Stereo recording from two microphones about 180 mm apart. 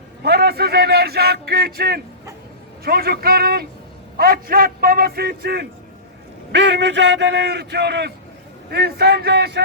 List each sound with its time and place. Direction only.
0.2 s a man's voice: 65° right (ahead or behind)
6.5 s a man's voice: 75° right (ahead or behind)